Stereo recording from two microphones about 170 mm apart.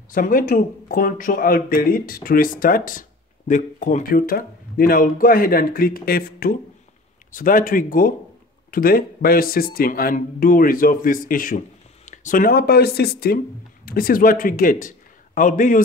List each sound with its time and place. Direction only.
0.1 s a man's voice: 55° left (ahead or behind)